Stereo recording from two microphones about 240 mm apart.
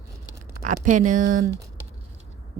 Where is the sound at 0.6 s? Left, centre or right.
Right.